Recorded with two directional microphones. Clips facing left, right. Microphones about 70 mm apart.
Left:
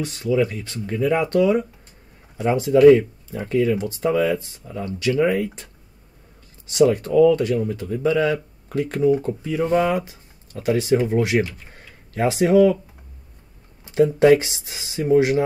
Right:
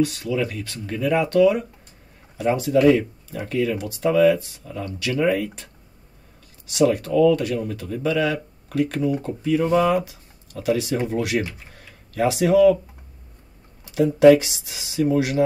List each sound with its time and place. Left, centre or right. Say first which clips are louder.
0.0 s speech: left 1 dB; left
6.9 s speech: left 2 dB; left
11.7 s tick-tock: left 2 dB; left
13.9 s speech: right 1 dB; left